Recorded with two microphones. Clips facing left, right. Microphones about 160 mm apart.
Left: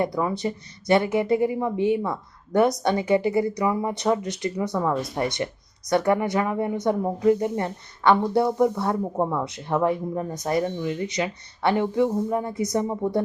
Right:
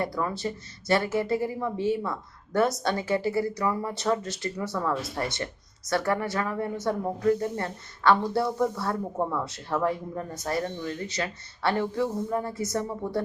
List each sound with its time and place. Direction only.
0.0 s a woman's voice: 15° left (ahead or behind)